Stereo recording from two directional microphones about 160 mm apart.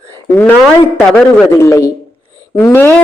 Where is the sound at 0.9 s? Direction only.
10° left (ahead or behind).